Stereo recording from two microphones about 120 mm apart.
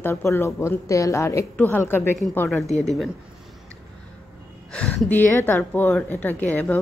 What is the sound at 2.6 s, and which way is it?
Speech, 70° left (ahead or behind).